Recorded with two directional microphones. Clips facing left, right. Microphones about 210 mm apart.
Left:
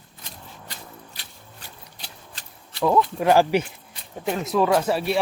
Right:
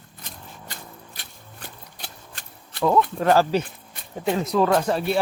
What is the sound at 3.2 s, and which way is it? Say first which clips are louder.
Speech: left 2 dB; 15° left (ahead or behind).